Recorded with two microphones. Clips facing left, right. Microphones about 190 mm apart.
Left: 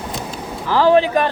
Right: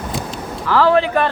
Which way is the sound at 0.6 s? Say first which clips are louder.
Left 1 dB; 15° left (ahead or behind).